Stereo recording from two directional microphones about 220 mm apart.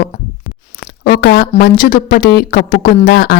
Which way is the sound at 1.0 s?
45° left (ahead or behind).